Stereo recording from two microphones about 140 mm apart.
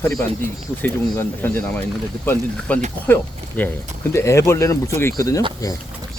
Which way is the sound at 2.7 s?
10° left (ahead or behind).